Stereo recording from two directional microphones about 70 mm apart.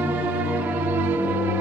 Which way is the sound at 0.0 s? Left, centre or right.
Right.